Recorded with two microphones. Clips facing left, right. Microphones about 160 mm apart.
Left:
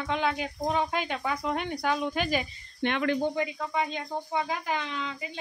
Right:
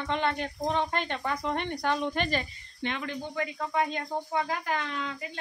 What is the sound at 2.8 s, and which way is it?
Speech, 65° left (ahead or behind).